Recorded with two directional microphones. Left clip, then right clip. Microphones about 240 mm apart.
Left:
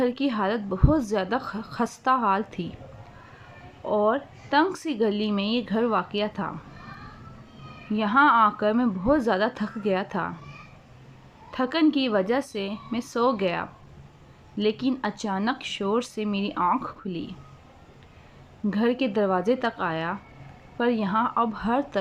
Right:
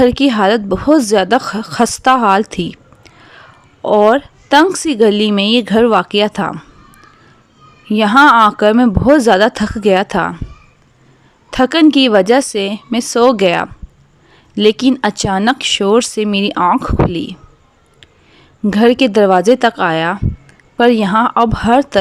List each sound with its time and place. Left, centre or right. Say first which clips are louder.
0.0 s speech: right 14 dB; right
3.8 s speech: right 14 dB; right
7.9 s speech: right 12 dB; right
11.5 s speech: right 13 dB; right
18.6 s speech: right 15 dB; right